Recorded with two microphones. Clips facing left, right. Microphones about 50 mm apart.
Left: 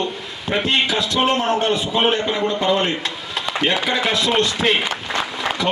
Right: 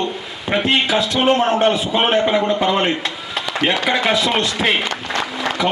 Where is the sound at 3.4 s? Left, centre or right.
Centre.